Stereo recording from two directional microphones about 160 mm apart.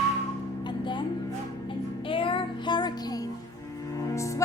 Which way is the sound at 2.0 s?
30° left (ahead or behind).